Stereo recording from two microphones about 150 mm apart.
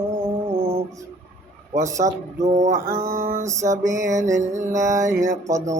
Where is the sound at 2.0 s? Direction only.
50° right (ahead or behind).